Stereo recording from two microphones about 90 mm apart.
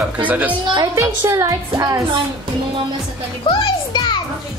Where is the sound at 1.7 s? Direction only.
45° right (ahead or behind).